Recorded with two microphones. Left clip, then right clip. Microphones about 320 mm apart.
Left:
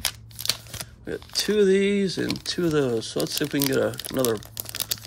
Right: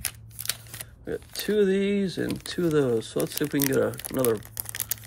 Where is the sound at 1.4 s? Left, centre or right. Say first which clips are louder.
Left 4 dB; centre.